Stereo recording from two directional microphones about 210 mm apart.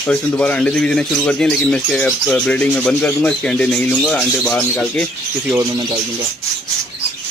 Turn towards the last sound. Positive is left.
turn(degrees=-15)  # may be behind; listen again after turning